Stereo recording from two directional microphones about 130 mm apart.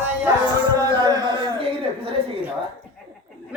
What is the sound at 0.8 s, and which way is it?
Speech, 35° right (ahead or behind).